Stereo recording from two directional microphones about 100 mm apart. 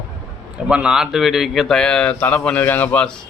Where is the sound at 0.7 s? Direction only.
10° right (ahead or behind); by 3.1 s 15° left (ahead or behind).